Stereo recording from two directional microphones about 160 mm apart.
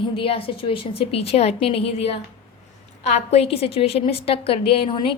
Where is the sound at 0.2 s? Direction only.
35° left (ahead or behind).